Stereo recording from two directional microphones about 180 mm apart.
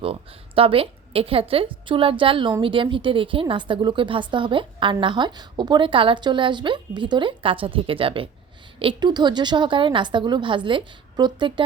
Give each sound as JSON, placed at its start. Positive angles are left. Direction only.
{"t": 0.0, "sound": "a woman's voice", "side_deg": -30}